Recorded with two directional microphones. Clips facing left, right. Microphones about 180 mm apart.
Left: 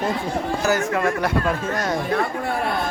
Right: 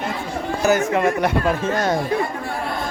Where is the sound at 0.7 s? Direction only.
20° right (ahead or behind).